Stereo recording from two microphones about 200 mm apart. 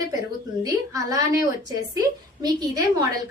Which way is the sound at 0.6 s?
20° right (ahead or behind).